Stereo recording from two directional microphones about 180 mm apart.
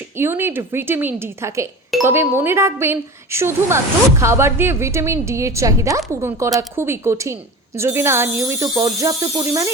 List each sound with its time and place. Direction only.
0.2 s speech: 15° right (ahead or behind)